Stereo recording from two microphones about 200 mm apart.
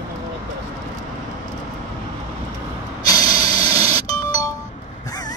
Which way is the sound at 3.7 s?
15° left (ahead or behind).